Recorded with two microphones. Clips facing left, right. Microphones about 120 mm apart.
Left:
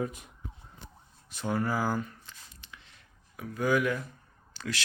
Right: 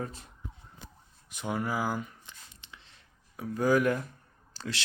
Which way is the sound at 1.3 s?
15° right (ahead or behind).